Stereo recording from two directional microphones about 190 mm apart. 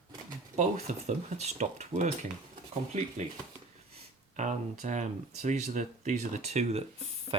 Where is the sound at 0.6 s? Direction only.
35° right (ahead or behind).